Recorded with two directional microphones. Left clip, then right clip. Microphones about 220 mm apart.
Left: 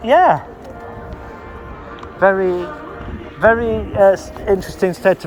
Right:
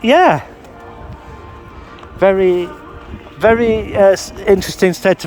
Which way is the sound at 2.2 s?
90° right.